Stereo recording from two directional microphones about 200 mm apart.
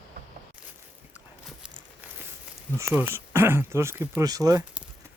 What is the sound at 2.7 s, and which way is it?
Speech, 10° right (ahead or behind).